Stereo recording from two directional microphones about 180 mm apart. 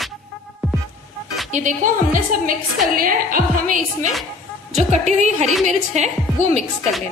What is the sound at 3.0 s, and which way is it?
Speech, 50° right (ahead or behind).